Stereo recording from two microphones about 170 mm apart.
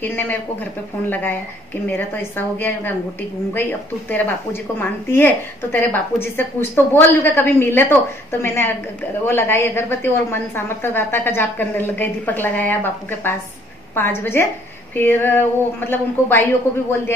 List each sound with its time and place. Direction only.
0.0 s a woman's voice: 10° left (ahead or behind)
1.9 s a woman's voice: 10° left (ahead or behind)